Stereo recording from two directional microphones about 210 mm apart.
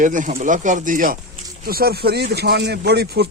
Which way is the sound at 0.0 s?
35° right (ahead or behind).